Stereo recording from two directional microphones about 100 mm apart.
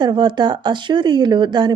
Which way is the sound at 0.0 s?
50° right (ahead or behind).